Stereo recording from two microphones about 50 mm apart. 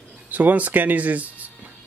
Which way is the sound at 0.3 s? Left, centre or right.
Right.